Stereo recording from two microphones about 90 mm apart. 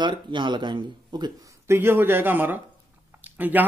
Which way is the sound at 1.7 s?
25° right (ahead or behind).